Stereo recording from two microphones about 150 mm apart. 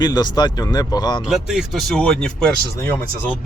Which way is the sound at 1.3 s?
Centre (ahead or behind).